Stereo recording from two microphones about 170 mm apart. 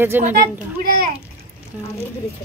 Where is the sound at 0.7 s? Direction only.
60° right (ahead or behind).